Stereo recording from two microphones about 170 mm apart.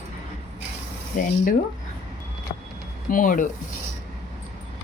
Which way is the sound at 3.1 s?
50° left (ahead or behind).